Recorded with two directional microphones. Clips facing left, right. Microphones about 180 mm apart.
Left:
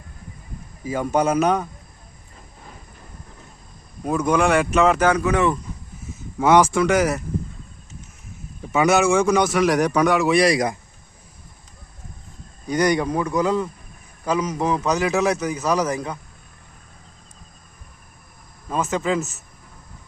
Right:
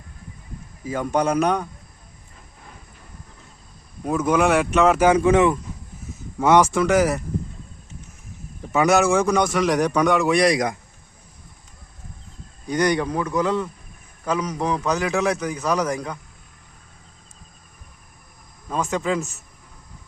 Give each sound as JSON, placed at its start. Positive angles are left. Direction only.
{"t": 0.9, "sound": "a man's voice", "side_deg": 10}
{"t": 4.0, "sound": "a man's voice", "side_deg": 0}
{"t": 5.1, "sound": "speech", "side_deg": -25}
{"t": 6.4, "sound": "a man's voice", "side_deg": 0}
{"t": 8.7, "sound": "a man's voice", "side_deg": 0}
{"t": 12.6, "sound": "a man's voice", "side_deg": 10}
{"t": 18.7, "sound": "a man's voice", "side_deg": 5}